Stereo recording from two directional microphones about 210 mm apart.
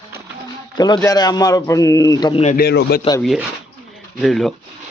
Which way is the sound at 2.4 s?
45° left (ahead or behind).